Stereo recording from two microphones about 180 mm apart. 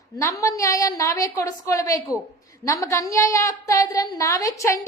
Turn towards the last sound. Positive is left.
turn(degrees=15)  # may be behind; listen again after turning